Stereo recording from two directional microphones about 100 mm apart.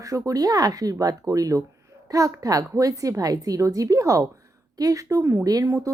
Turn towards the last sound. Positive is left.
turn(degrees=-30)  # may be behind; listen again after turning